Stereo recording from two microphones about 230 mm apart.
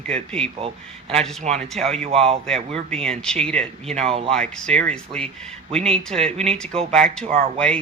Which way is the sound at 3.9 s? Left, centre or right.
Right.